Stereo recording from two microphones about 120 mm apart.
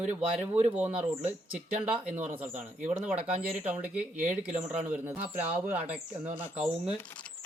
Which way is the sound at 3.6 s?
10° right (ahead or behind).